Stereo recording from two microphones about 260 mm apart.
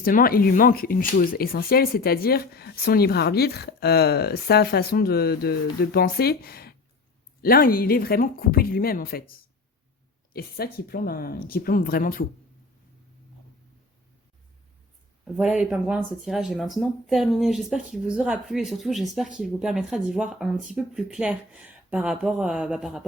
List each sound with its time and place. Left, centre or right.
0.0 s speech: left
15.2 s speech: centre